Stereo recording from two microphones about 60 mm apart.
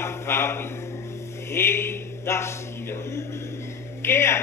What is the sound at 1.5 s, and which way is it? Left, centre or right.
Mantra, left.